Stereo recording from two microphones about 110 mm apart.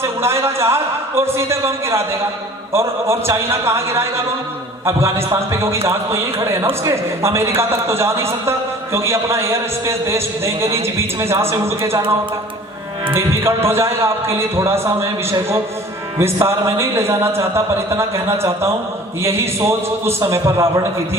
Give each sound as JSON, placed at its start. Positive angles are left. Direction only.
{"t": 0.0, "sound": "a man's voice", "side_deg": -25}
{"t": 13.1, "sound": "a man's voice", "side_deg": -25}